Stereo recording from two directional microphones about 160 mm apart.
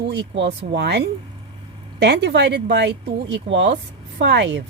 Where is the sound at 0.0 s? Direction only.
90° right.